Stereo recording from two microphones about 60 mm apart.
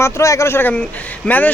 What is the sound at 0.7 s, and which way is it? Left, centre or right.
Speech, left.